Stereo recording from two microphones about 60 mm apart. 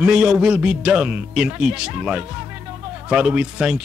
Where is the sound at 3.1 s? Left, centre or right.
Centre.